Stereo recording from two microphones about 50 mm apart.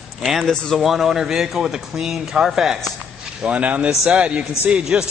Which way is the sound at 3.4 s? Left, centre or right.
Right.